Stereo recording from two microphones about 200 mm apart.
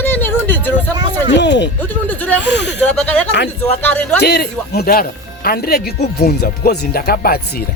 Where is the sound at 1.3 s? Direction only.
60° left (ahead or behind).